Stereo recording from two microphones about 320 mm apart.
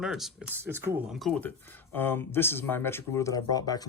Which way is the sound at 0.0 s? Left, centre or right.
Centre.